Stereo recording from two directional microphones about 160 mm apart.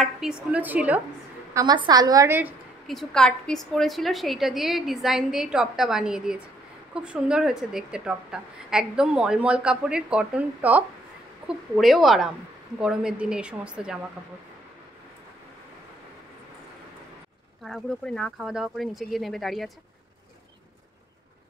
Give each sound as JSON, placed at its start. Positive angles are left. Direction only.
{"t": 0.0, "sound": "a woman's voice", "side_deg": -5}
{"t": 1.5, "sound": "a woman's voice", "side_deg": -25}
{"t": 2.9, "sound": "a woman's voice", "side_deg": 5}
{"t": 17.6, "sound": "a woman's voice", "side_deg": 0}